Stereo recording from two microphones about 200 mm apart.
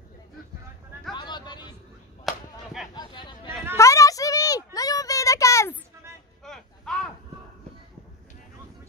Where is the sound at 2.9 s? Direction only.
25° left (ahead or behind).